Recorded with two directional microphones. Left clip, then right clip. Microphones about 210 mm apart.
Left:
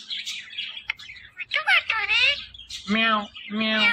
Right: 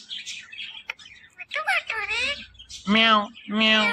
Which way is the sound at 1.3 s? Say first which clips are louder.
Left 4 dB; 20° right (ahead or behind).